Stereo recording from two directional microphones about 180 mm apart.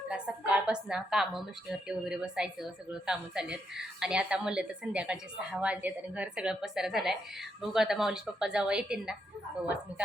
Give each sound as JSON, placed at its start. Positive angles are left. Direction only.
{"t": 0.1, "sound": "speech", "side_deg": -5}